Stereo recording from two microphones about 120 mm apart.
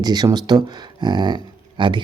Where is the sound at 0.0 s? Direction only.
35° right (ahead or behind).